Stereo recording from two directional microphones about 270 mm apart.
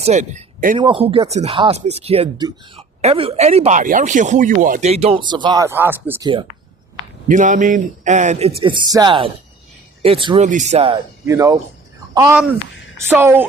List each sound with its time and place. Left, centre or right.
0.0 s speech: right; by 6.3 s centre
7.3 s speech: right; by 13.5 s centre